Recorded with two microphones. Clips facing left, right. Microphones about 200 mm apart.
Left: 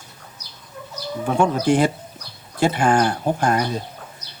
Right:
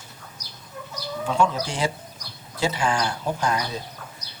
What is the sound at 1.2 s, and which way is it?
Speech, 55° left (ahead or behind).